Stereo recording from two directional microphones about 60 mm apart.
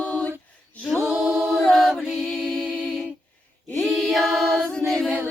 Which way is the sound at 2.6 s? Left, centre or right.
Centre.